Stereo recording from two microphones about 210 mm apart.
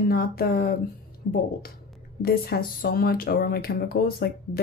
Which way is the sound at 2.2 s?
45° left (ahead or behind).